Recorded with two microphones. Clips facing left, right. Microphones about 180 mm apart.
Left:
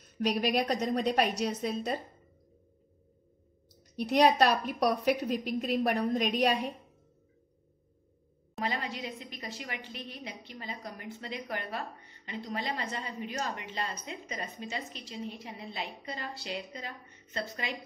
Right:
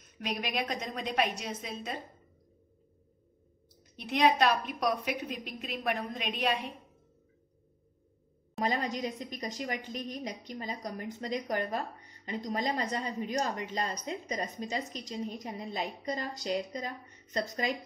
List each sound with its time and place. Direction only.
0.0 s a woman's voice: 35° left (ahead or behind)
3.9 s a woman's voice: 40° left (ahead or behind)
8.6 s a woman's voice: 40° right (ahead or behind)